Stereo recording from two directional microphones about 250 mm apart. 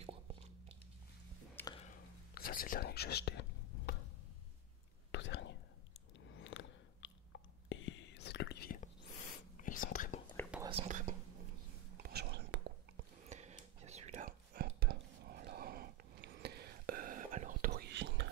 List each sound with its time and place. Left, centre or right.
0.0 s a sound: right
1.5 s a sound: centre
1.8 s whispering: left
5.1 s whispering: left
6.1 s biting: left
7.7 s whispering: left
10.7 s whispering: right
12.0 s whispering: right
13.3 s whispering: right